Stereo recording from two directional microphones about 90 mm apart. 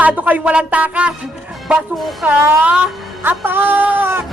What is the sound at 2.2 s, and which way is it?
Speech, 15° right (ahead or behind).